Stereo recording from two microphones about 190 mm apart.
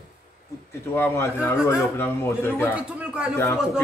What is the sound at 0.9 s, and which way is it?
A man's voice, 15° left (ahead or behind).